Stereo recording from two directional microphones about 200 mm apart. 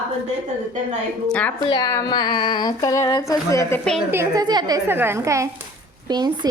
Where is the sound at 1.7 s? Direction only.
20° left (ahead or behind).